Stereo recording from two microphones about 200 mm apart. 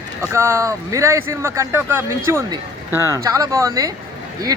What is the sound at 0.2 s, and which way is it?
Speech, 15° right (ahead or behind).